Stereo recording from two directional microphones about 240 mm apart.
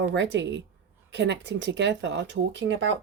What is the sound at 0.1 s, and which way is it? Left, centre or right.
Speech, right.